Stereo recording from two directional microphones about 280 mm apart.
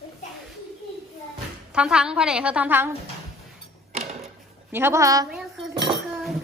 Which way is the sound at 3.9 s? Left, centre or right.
Right.